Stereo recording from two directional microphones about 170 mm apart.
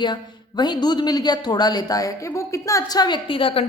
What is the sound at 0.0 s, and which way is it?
A woman's voice, 25° left (ahead or behind).